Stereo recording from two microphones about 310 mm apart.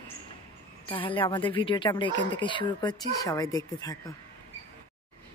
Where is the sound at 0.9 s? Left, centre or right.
Centre.